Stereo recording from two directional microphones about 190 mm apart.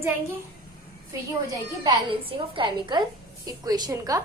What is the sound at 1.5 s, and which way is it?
A woman's voice, 20° right (ahead or behind).